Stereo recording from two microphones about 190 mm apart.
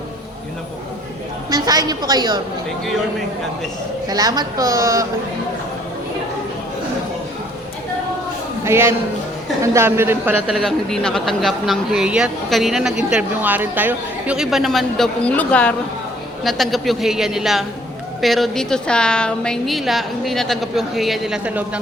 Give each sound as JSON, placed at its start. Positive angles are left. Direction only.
{"t": 1.5, "sound": "a woman's voice", "side_deg": -20}
{"t": 4.1, "sound": "a woman's voice", "side_deg": -20}
{"t": 8.6, "sound": "a man's voice", "side_deg": -15}